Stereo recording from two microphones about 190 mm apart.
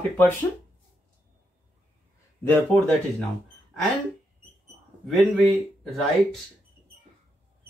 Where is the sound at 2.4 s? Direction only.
10° left (ahead or behind).